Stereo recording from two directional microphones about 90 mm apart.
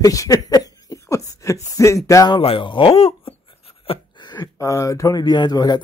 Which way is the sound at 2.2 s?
75° left (ahead or behind).